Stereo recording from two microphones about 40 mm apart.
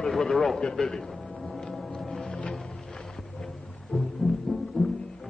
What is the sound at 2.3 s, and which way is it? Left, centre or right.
Music, centre.